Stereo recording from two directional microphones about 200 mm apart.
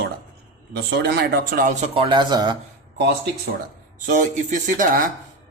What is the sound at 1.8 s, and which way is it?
Speech, 30° right (ahead or behind).